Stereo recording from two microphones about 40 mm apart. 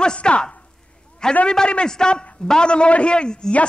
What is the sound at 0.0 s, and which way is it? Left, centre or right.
A man's voice, left.